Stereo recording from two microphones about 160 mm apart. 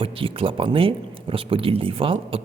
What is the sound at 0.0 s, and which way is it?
Speech, 35° right (ahead or behind).